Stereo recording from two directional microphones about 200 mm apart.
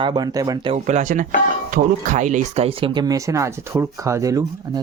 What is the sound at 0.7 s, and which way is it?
Speech, 35° right (ahead or behind).